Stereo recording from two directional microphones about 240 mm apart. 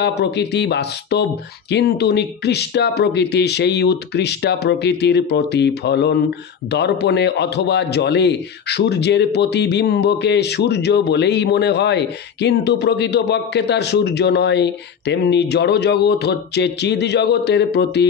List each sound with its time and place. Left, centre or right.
0.0 s a man's voice: left